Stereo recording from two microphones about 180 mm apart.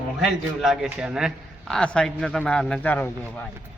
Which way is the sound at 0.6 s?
Centre (ahead or behind).